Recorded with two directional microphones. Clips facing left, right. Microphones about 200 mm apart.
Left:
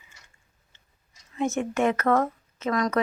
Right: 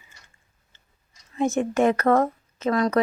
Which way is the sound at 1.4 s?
35° right (ahead or behind).